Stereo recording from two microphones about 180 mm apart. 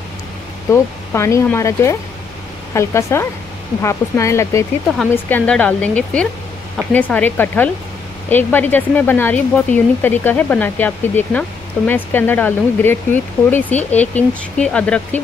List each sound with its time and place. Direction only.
1.1 s speech: 15° left (ahead or behind)